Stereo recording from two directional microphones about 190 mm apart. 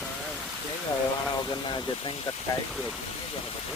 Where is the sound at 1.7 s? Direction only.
25° left (ahead or behind).